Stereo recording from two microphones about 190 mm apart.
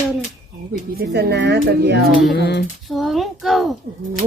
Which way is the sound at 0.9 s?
60° right (ahead or behind).